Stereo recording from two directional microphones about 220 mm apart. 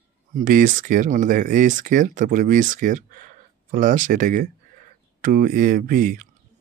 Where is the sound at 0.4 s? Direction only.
40° right (ahead or behind).